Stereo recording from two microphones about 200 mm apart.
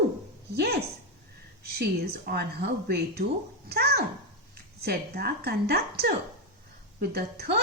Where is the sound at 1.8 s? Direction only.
50° right (ahead or behind).